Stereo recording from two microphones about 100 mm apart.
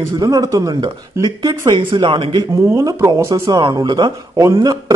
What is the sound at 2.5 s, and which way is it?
Speech, 30° right (ahead or behind).